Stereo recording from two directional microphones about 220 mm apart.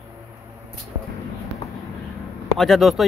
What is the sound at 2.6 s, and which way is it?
Speech, centre (ahead or behind).